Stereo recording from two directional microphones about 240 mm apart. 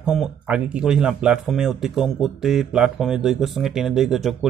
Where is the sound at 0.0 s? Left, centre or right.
Centre.